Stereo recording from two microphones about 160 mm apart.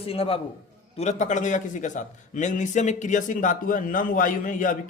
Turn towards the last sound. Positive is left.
turn(degrees=55)  # may be behind; listen again after turning